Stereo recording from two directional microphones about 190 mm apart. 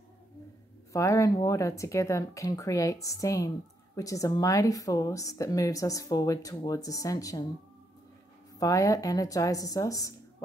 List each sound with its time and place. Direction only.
0.9 s speech: 15° left (ahead or behind)
8.5 s speech: 15° left (ahead or behind)